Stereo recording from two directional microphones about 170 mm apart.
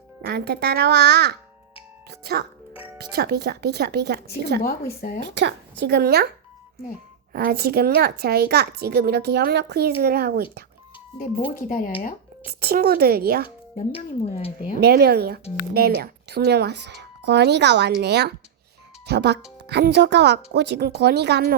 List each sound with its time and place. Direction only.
0.2 s speech: 75° right (ahead or behind)
4.9 s speech: 55° left (ahead or behind)
5.4 s speech: 85° right
7.3 s speech: 65° right (ahead or behind)
12.5 s speech: 65° right (ahead or behind)
13.7 s speech: 35° left (ahead or behind)
14.8 s speech: 65° right (ahead or behind)